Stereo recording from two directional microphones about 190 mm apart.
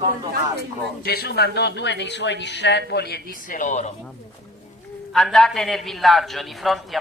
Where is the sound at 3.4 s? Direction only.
40° left (ahead or behind).